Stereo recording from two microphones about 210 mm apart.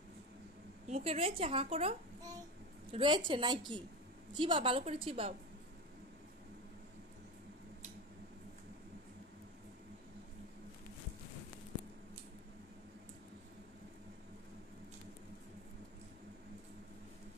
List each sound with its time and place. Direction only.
0.8 s a woman's voice: 30° right (ahead or behind)